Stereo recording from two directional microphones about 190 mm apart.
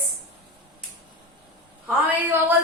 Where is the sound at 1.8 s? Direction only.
10° right (ahead or behind).